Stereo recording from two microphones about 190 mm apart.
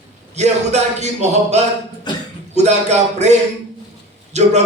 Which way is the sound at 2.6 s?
35° right (ahead or behind).